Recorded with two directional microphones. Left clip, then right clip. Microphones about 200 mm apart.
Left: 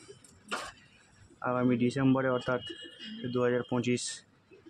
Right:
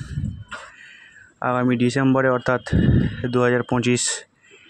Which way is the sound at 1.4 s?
30° right (ahead or behind).